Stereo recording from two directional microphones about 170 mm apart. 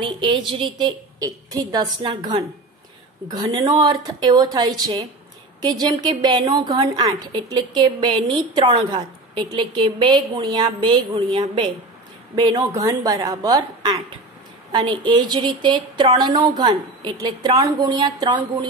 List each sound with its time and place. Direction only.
0.0 s a woman's voice: 30° right (ahead or behind)